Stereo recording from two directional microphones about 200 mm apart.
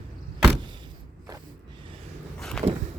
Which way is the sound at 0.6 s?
25° right (ahead or behind).